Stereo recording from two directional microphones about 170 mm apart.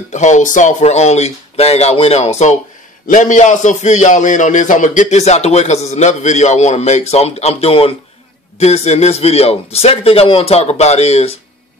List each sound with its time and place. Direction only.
0.1 s a man's voice: 45° left (ahead or behind)